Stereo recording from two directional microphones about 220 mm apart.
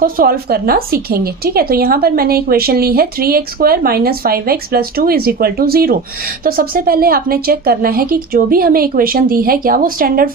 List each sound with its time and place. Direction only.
0.0 s a woman's voice: 40° right (ahead or behind)